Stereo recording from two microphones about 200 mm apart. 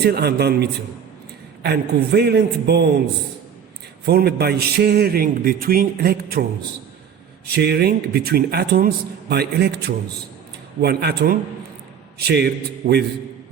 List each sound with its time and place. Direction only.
0.0 s a man's voice: 55° right (ahead or behind)
4.0 s a man's voice: 50° right (ahead or behind)
7.5 s a man's voice: 55° right (ahead or behind)